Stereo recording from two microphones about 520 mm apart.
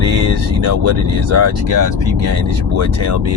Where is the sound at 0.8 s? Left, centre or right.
Right.